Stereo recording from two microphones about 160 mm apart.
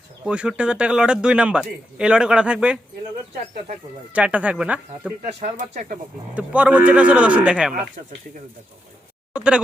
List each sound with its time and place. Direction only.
0.3 s speech: 5° right (ahead or behind)
4.1 s speech: 10° right (ahead or behind)
5.4 s speech: 50° right (ahead or behind)
6.3 s speech: 10° right (ahead or behind)
9.3 s speech: 5° right (ahead or behind)